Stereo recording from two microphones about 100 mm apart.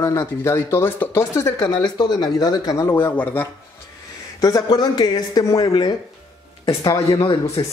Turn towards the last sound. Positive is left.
turn(degrees=65)  # may be behind; listen again after turning